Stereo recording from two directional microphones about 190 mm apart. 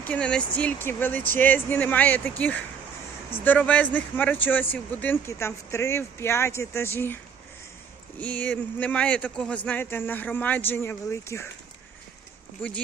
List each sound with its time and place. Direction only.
0.0 s speech: 5° left (ahead or behind)
8.2 s speech: 5° left (ahead or behind)